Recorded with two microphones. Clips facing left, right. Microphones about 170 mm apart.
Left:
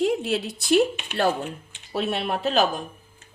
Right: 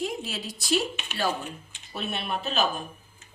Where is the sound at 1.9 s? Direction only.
90° left.